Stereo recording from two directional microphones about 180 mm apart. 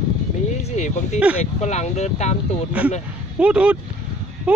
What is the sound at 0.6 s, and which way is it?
Speech, 40° left (ahead or behind).